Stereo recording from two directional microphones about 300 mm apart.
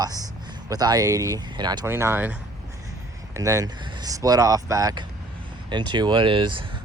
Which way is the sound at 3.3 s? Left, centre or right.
Centre.